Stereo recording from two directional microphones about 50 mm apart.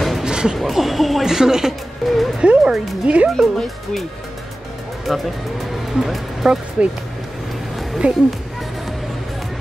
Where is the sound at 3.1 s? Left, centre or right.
Right.